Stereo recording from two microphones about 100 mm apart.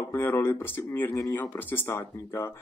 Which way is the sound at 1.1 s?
30° left (ahead or behind).